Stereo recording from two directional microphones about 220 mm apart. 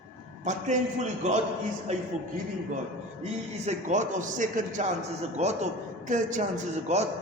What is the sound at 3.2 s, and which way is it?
A man's voice, 30° right (ahead or behind).